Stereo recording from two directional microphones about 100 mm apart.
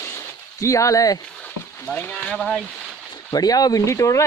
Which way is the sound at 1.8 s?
15° left (ahead or behind).